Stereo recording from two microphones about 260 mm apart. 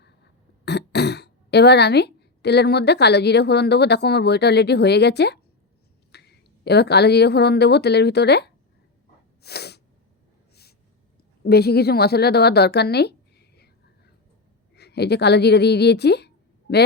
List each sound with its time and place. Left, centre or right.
0.6 s speech: left
6.1 s a sound: left
6.7 s speech: left
9.4 s sneeze: left
10.5 s snort: left
11.4 s a woman's voice: left
14.8 s speech: left